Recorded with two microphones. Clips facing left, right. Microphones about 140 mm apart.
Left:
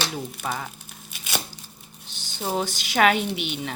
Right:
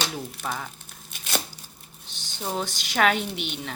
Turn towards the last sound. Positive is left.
turn(degrees=5)  # may be behind; listen again after turning